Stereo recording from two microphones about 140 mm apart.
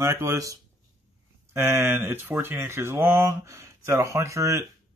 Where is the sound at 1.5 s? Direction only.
15° right (ahead or behind).